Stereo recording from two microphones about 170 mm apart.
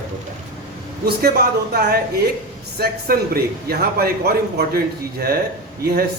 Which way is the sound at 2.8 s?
65° right (ahead or behind).